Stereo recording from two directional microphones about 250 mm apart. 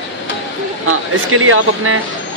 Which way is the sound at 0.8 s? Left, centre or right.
Right.